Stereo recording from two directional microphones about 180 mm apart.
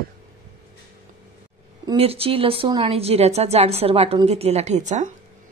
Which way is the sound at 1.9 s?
30° right (ahead or behind).